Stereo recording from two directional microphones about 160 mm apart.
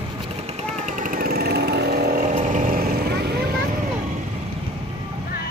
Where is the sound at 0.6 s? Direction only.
50° right (ahead or behind); by 2.2 s 80° right.